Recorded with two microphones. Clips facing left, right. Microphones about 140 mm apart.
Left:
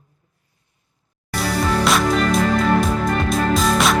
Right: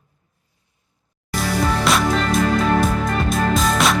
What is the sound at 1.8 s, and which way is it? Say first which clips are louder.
Music: left 3 dB; centre (ahead or behind).